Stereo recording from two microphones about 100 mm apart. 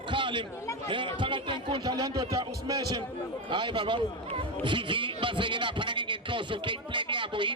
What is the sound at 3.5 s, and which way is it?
Speech, 55° right (ahead or behind).